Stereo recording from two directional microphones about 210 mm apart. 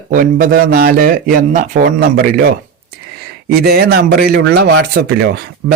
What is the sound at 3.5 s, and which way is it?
Speech, 45° right (ahead or behind).